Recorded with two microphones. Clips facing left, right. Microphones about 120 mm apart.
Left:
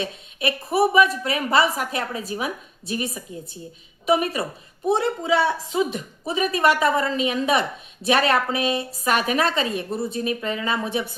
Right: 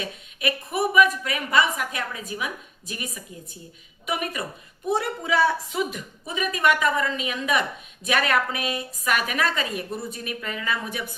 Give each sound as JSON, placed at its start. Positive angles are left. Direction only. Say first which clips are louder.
{"t": 0.0, "sound": "a woman's voice", "louder": "left 3 dB", "side_deg": 30}